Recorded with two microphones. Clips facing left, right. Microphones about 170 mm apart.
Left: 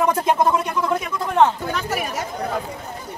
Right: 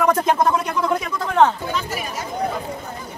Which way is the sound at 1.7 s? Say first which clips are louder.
Left 1 dB; 60° left (ahead or behind).